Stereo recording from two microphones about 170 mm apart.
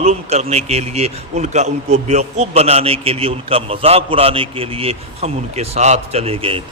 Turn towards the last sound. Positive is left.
turn(degrees=-35)  # may be behind; listen again after turning